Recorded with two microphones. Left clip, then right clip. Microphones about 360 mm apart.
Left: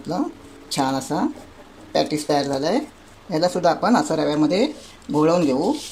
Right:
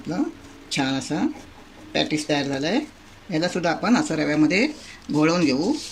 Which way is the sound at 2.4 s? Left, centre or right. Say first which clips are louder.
Left 3 dB; left.